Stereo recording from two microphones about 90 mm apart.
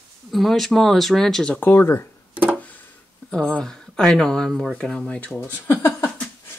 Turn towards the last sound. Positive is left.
turn(degrees=25)  # may be behind; listen again after turning